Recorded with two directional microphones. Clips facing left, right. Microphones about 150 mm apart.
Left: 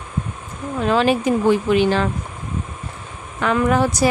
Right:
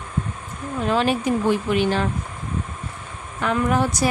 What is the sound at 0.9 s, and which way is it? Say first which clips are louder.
A woman's voice: left 4 dB; 90° left.